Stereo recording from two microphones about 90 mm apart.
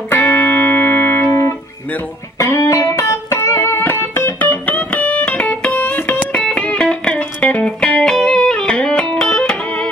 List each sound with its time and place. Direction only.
0.1 s music: 25° left (ahead or behind)